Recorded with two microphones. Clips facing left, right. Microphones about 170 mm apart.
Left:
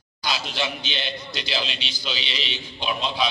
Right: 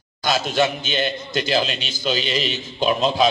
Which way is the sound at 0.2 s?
45° right (ahead or behind).